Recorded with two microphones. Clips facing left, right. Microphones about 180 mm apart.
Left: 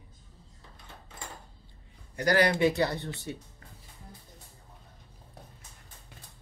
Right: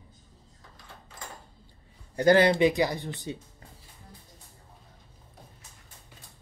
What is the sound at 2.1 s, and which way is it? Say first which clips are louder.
Speech: right 5 dB; 25° right (ahead or behind).